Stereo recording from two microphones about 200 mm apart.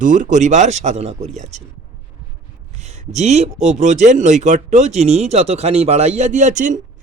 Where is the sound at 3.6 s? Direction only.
35° right (ahead or behind).